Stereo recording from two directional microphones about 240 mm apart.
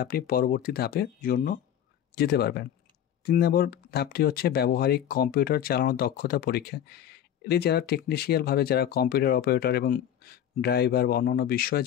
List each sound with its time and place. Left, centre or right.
0.0 s speech: left